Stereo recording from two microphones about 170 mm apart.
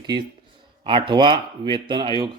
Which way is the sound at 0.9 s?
30° right (ahead or behind).